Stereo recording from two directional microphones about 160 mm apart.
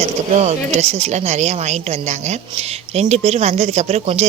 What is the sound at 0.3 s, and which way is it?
Speech, 45° right (ahead or behind).